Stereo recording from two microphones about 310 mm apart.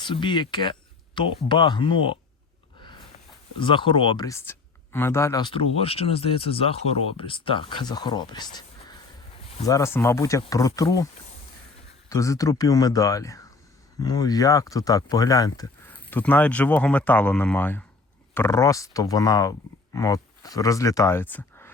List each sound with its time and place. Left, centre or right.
0.0 s speech: centre
2.8 s a sound: centre
3.6 s speech: centre